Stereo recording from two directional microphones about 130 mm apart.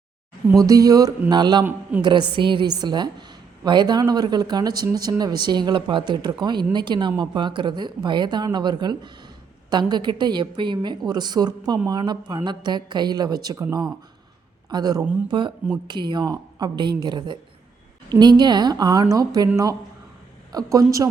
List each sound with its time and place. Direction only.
0.6 s a woman's voice: 25° right (ahead or behind)
14.7 s a woman's voice: 30° right (ahead or behind)
20.5 s speech: 30° right (ahead or behind)